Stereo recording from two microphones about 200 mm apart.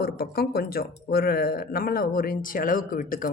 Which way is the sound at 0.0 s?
50° left (ahead or behind).